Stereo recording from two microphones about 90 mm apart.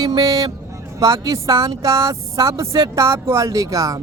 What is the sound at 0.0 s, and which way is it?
Speech, 45° right (ahead or behind).